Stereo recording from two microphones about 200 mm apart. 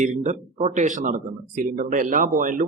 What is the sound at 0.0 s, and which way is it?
Speech, 40° right (ahead or behind).